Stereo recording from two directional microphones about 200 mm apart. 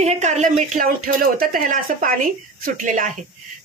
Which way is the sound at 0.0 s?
35° right (ahead or behind).